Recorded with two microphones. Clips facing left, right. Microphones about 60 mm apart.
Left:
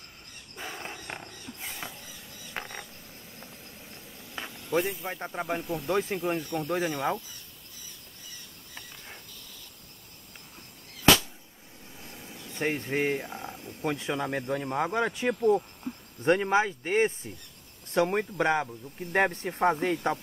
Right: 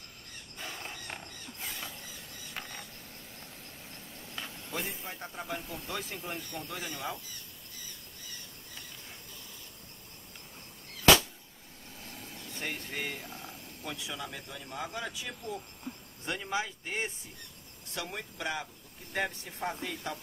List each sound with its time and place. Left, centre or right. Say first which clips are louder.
0.6 s wild animals: left 4 dB; left
0.9 s a sound: left 3 dB; left
2.5 s mechanisms: left 5 dB; left
4.4 s a sound: left 4 dB; left
5.0 s speech: left 7 dB; left
5.6 s speech: left 9 dB; centre
5.9 s speech: left 12 dB; left
11.9 s vehicle: left 1 dB; centre
12.5 s a sound: left 10 dB; left
13.8 s speech: left 10 dB; left